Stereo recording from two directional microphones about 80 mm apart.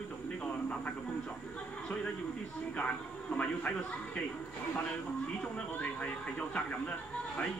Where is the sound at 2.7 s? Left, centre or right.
Centre.